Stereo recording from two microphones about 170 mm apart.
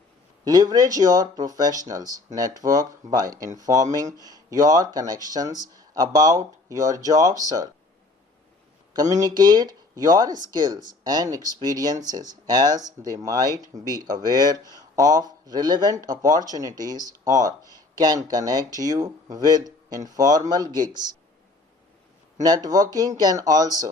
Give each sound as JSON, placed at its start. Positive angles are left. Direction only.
{"t": 0.4, "sound": "speech", "side_deg": -20}
{"t": 8.9, "sound": "speech", "side_deg": -20}
{"t": 22.4, "sound": "speech", "side_deg": -20}